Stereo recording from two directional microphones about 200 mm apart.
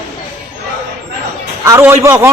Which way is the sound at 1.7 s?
15° right (ahead or behind).